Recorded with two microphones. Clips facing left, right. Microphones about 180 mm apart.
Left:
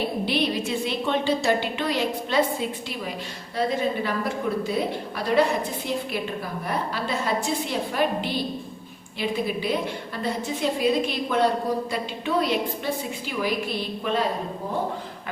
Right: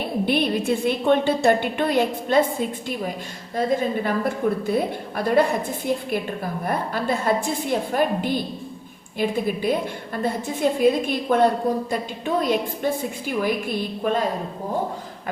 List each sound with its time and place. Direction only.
0.3 s a woman's voice: 55° right (ahead or behind)